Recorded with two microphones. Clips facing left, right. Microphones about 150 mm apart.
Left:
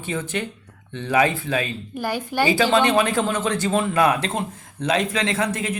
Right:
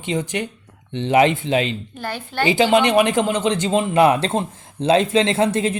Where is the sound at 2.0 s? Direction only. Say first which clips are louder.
Left 3 dB; 10° left (ahead or behind).